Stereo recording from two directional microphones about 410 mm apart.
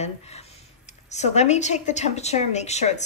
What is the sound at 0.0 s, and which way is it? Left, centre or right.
Speech, centre.